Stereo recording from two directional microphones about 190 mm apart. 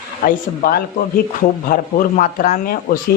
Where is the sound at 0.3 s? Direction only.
50° left (ahead or behind).